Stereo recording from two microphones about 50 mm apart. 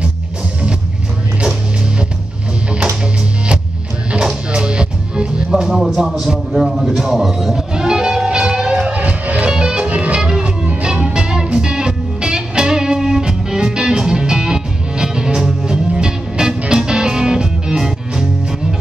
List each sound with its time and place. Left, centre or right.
4.1 s music: centre